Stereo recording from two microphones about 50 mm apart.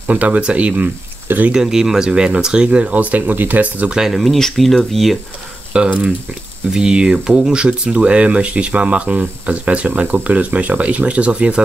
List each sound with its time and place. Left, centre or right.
0.1 s speech: right
1.5 s speech: centre; by 3.9 s right
4.1 s speech: centre
5.7 s speech: centre